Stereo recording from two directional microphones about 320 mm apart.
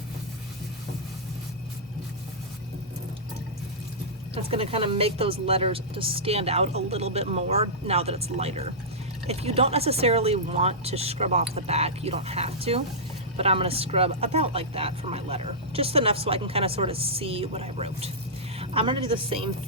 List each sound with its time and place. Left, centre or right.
4.4 s speech: centre